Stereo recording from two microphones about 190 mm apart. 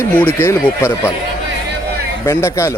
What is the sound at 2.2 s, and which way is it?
Speech, 15° left (ahead or behind).